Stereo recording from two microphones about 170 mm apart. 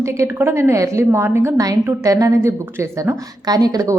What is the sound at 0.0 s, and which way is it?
A woman's voice, 15° right (ahead or behind).